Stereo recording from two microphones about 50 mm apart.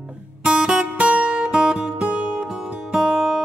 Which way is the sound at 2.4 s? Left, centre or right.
Centre.